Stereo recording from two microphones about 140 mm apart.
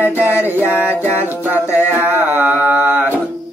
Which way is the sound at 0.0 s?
15° right (ahead or behind).